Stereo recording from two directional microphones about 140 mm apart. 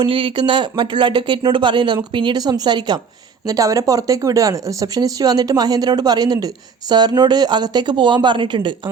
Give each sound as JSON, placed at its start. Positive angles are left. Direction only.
{"t": 0.0, "sound": "speech", "side_deg": -35}